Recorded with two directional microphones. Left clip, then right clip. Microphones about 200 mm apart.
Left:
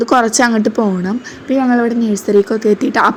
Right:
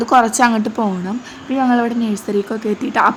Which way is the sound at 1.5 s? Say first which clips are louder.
Left 2 dB; centre (ahead or behind).